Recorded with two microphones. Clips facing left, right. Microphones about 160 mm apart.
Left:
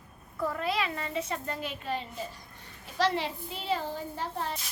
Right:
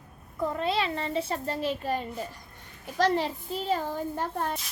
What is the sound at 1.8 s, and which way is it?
A child's voice, 45° right (ahead or behind).